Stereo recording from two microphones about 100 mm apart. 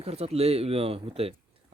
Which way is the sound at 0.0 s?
90° right.